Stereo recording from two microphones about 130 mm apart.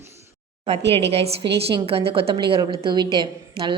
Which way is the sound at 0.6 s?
50° right (ahead or behind).